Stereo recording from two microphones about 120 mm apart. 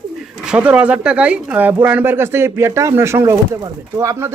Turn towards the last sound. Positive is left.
turn(degrees=-25)  # may be behind; listen again after turning